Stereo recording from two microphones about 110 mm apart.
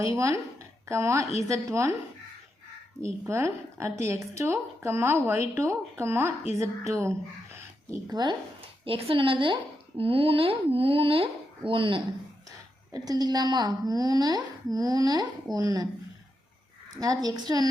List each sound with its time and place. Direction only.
0.0 s speech: 30° right (ahead or behind)
3.0 s speech: 25° right (ahead or behind)
8.1 s a woman's voice: 40° right (ahead or behind)
8.8 s a woman's voice: 55° right (ahead or behind)
12.9 s a woman's voice: 35° right (ahead or behind)
17.0 s a woman's voice: 35° right (ahead or behind)